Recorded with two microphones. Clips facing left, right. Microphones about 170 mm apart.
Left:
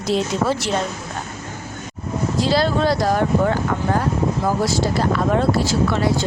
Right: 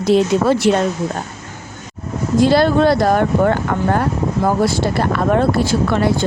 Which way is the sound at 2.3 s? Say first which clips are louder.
Right 7 dB; 55° right (ahead or behind).